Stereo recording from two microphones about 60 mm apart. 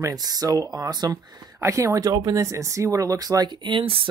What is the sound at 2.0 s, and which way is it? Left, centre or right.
Speech, right.